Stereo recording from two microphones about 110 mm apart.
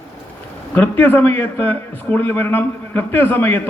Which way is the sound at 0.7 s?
15° left (ahead or behind).